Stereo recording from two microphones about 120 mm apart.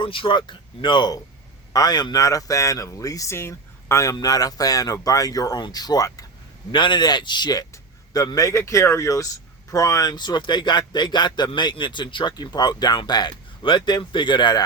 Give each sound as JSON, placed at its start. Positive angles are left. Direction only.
{"t": 0.0, "sound": "speech", "side_deg": 45}
{"t": 6.7, "sound": "speech", "side_deg": 40}